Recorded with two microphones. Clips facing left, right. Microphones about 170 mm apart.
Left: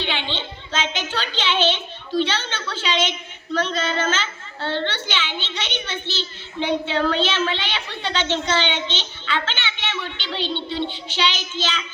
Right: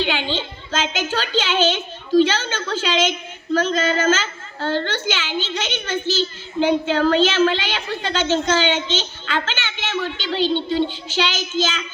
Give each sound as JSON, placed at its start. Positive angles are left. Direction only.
{"t": 0.0, "sound": "a woman's voice", "side_deg": -40}